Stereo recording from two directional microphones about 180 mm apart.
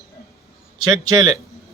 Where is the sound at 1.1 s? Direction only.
25° right (ahead or behind).